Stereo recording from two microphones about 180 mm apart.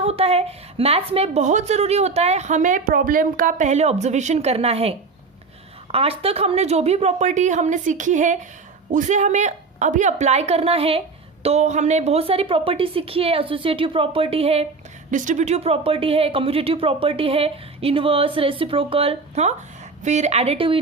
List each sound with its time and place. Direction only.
0.0 s a woman's voice: 35° right (ahead or behind)
15.1 s a woman's voice: 45° right (ahead or behind)